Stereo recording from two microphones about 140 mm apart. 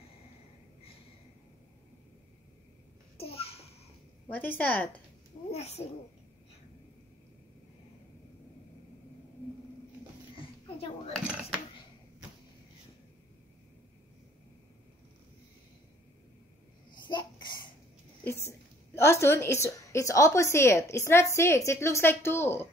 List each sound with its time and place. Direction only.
3.2 s babbling: 45° left (ahead or behind)
4.3 s a woman's voice: 10° left (ahead or behind)
5.5 s a child's voice: 50° left (ahead or behind)
10.3 s a sound: 40° left (ahead or behind)
16.9 s babbling: 35° left (ahead or behind)
18.9 s a woman's voice: 20° left (ahead or behind)